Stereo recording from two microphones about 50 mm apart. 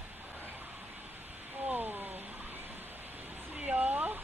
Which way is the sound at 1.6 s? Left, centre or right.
Right.